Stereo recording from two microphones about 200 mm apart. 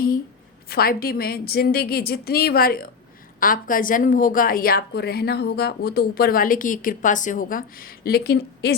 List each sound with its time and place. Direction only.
0.7 s a woman's voice: 50° left (ahead or behind)